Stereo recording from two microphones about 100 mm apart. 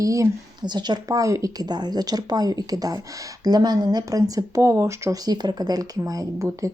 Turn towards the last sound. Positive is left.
turn(degrees=-30)  # may be behind; listen again after turning